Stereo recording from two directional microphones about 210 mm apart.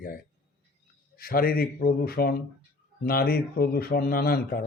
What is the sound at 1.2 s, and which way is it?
A man's voice, 45° left (ahead or behind).